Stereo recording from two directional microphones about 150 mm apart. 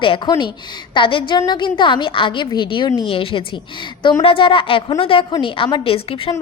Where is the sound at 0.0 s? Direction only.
30° left (ahead or behind).